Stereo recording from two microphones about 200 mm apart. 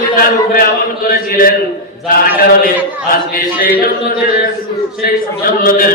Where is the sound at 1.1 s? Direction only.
45° left (ahead or behind).